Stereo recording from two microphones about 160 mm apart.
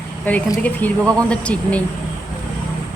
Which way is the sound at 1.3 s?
10° left (ahead or behind).